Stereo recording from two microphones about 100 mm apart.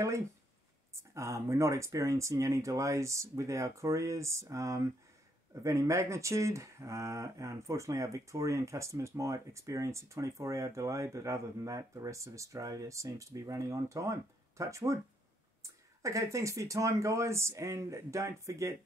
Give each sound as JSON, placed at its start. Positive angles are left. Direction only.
{"t": 0.9, "sound": "speech", "side_deg": -30}